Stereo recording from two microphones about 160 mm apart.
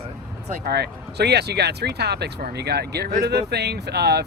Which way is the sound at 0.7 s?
90° right.